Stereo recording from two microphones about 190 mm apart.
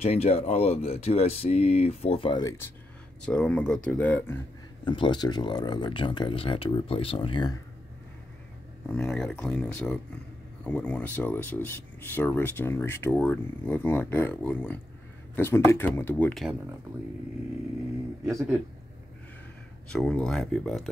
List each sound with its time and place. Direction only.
0.0 s speech: 35° left (ahead or behind); by 4.4 s 10° left (ahead or behind)
4.8 s speech: 25° left (ahead or behind)
8.9 s speech: 5° left (ahead or behind)
19.9 s speech: 5° left (ahead or behind)